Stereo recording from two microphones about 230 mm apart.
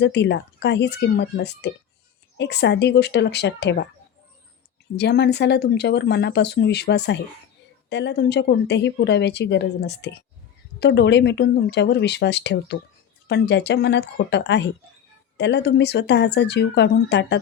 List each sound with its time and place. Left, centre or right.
0.0 s a woman's voice: left
4.9 s a woman's voice: left